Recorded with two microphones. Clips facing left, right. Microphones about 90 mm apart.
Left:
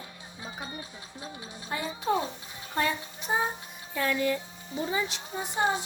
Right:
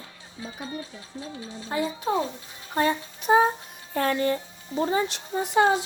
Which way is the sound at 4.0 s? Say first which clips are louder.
Right 4 dB; 45° right (ahead or behind).